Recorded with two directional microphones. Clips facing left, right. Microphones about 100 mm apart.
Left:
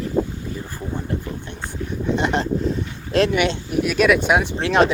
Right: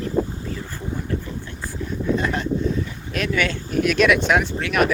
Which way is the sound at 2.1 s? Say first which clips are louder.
Left 3 dB; 25° left (ahead or behind).